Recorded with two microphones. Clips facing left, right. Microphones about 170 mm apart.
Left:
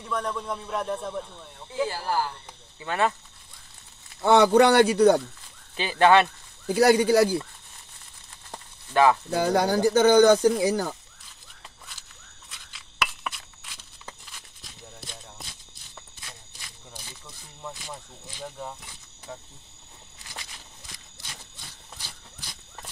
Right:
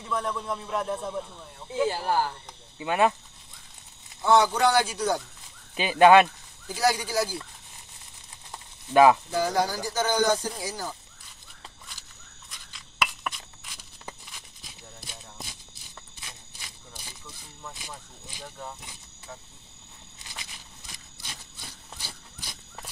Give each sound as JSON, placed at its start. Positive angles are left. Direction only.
{"t": 0.0, "sound": "a man's voice", "side_deg": 0}
{"t": 1.9, "sound": "speech", "side_deg": -20}
{"t": 4.2, "sound": "speech", "side_deg": 60}
{"t": 5.8, "sound": "speech", "side_deg": -15}
{"t": 6.7, "sound": "speech", "side_deg": 60}
{"t": 8.9, "sound": "speech", "side_deg": -15}
{"t": 9.3, "sound": "speech", "side_deg": 60}
{"t": 12.4, "sound": "a sound", "side_deg": 0}